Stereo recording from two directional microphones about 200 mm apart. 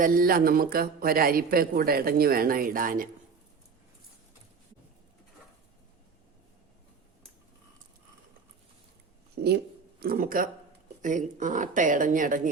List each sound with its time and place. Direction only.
0.0 s speech: 45° right (ahead or behind)
10.0 s speech: 45° right (ahead or behind)